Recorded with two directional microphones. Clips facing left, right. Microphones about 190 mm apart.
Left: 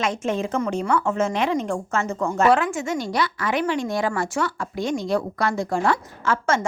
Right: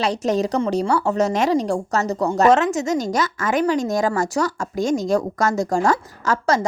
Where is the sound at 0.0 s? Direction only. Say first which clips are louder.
Right 4 dB; 35° right (ahead or behind).